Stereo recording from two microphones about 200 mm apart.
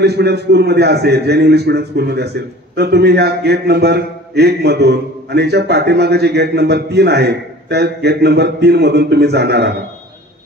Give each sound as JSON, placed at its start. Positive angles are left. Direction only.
{"t": 0.0, "sound": "a man's voice", "side_deg": -55}